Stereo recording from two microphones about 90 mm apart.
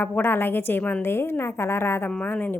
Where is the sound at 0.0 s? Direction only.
25° left (ahead or behind).